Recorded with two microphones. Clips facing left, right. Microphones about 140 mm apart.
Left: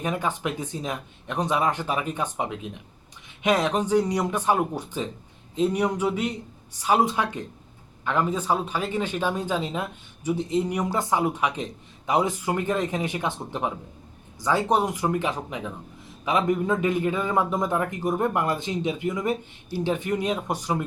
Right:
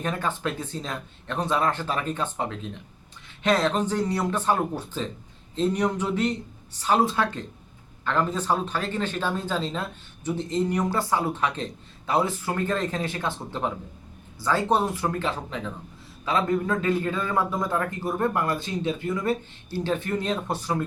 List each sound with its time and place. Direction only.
0.0 s a man's voice: 15° left (ahead or behind)